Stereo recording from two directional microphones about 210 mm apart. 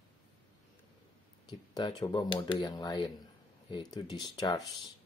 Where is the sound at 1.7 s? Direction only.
20° left (ahead or behind).